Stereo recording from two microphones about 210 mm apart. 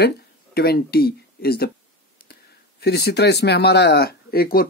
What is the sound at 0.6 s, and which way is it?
Speech, 50° left (ahead or behind).